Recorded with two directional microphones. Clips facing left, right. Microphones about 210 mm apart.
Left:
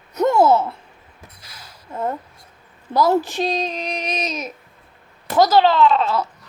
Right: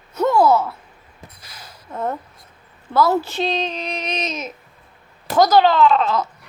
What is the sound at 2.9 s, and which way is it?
Speech, 15° left (ahead or behind).